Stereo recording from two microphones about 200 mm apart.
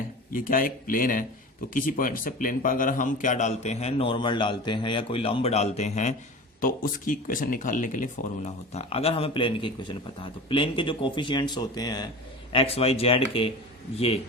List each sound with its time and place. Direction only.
0.3 s a man's voice: 45° left (ahead or behind); by 13.5 s 30° left (ahead or behind)